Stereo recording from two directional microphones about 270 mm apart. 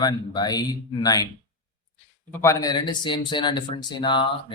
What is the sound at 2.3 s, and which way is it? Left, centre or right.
Speech, centre.